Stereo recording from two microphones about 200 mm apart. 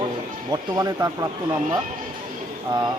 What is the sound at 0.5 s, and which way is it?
Speech, 20° right (ahead or behind).